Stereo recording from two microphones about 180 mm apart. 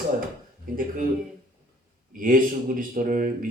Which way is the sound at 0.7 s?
45° right (ahead or behind).